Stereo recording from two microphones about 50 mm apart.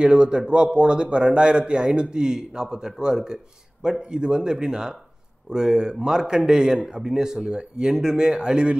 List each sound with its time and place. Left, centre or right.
0.0 s a man's voice: centre